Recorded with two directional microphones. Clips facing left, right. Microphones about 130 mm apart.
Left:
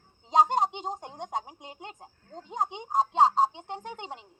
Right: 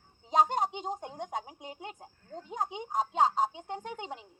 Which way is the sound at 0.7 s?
25° left (ahead or behind).